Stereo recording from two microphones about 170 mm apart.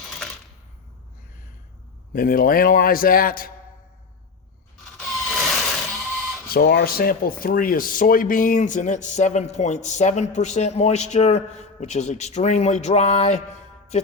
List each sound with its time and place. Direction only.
2.1 s a man's voice: 55° left (ahead or behind)
5.0 s a sound: centre (ahead or behind)
6.5 s speech: 65° left (ahead or behind); by 13.4 s 40° left (ahead or behind)